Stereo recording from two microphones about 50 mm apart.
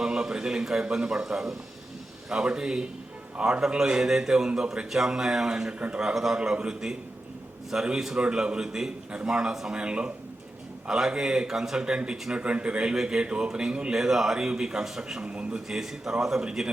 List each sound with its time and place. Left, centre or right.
0.0 s a man's voice: centre
14.0 s speech: centre
15.2 s a man's voice: right
15.7 s speech: centre